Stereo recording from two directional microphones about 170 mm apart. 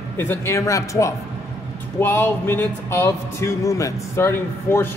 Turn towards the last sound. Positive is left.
turn(degrees=15)  # may be behind; listen again after turning